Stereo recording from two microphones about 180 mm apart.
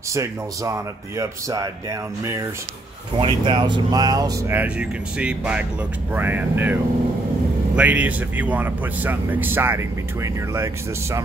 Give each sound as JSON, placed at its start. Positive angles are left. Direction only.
{"t": 0.1, "sound": "speech", "side_deg": -15}